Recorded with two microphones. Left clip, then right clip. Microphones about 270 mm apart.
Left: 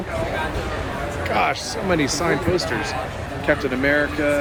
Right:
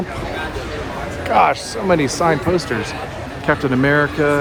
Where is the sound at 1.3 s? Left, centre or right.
Centre.